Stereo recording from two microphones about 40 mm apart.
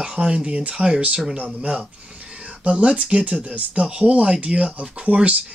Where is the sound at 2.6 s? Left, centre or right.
Right.